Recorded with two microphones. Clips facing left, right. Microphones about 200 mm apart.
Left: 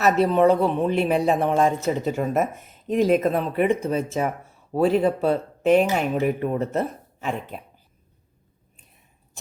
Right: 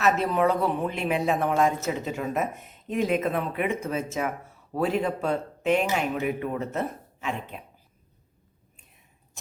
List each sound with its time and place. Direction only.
0.0 s speech: 30° left (ahead or behind)